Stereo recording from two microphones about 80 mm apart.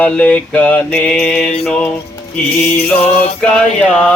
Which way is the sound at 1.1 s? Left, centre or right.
Centre.